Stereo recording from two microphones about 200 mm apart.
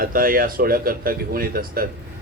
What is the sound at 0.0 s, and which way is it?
A man's voice, 45° right (ahead or behind).